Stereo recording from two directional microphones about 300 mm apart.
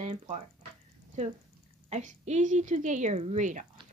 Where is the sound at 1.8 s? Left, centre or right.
Right.